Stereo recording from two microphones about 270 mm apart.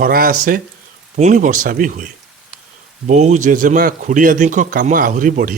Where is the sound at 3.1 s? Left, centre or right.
Right.